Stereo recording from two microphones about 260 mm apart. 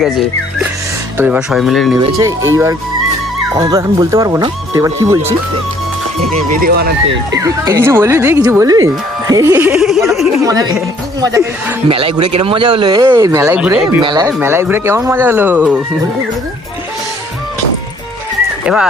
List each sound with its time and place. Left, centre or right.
1.2 s speech: centre
2.0 s speech: centre
3.5 s speech: centre
6.6 s speech: right
7.3 s speech: centre
10.4 s speech: centre
14.0 s speech: centre
18.6 s speech: centre